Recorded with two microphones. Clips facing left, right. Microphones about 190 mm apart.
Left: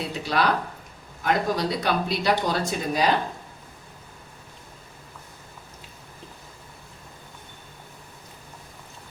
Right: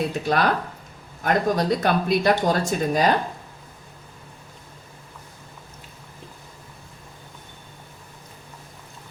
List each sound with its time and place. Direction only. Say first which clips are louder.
0.1 s speech: right 2 dB; 50° right (ahead or behind)